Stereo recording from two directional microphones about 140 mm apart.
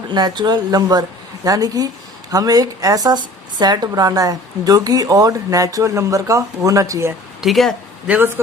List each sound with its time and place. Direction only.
0.1 s speech: 30° right (ahead or behind)
7.4 s speech: centre (ahead or behind)